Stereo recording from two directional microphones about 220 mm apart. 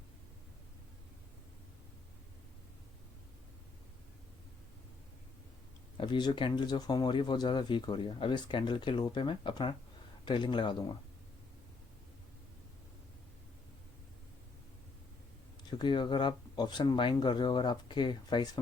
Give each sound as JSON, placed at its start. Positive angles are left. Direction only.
{"t": 6.0, "sound": "speech", "side_deg": 20}
{"t": 15.8, "sound": "speech", "side_deg": 20}